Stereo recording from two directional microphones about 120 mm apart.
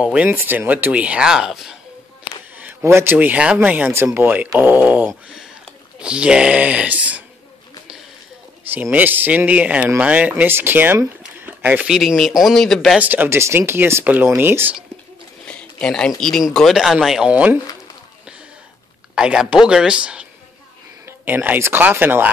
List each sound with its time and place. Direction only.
0.0 s speech: 10° right (ahead or behind)
2.5 s speech: 20° right (ahead or behind)
8.9 s speech: 15° right (ahead or behind); by 13.0 s centre (ahead or behind)
13.0 s speech: 15° right (ahead or behind)
15.4 s a sound: 5° left (ahead or behind)
16.2 s speech: 5° left (ahead or behind)
19.1 s speech: 5° right (ahead or behind)